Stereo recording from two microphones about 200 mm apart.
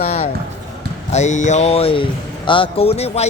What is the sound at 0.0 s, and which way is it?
Basketball bounce, 35° left (ahead or behind).